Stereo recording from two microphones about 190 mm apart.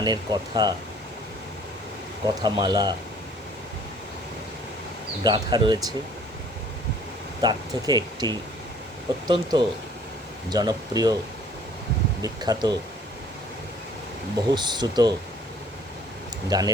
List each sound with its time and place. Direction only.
0.0 s speech: 20° right (ahead or behind)
2.2 s speech: 20° right (ahead or behind)
5.2 s speech: 25° right (ahead or behind)
7.4 s speech: 20° right (ahead or behind)
12.2 s speech: 20° right (ahead or behind)
14.5 s speech: 20° right (ahead or behind)
16.5 s speech: 20° right (ahead or behind)